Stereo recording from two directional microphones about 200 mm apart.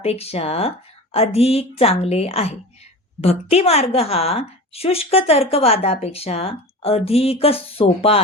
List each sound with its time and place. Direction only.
0.0 s a woman's voice: 30° left (ahead or behind)